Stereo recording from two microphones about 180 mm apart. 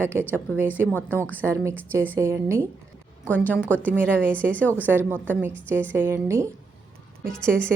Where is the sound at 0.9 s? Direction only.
10° left (ahead or behind).